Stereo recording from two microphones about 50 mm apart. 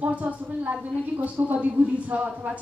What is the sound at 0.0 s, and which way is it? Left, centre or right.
A woman's voice, right.